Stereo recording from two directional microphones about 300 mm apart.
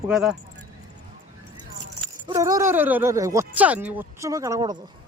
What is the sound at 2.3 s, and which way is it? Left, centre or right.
Speech, centre.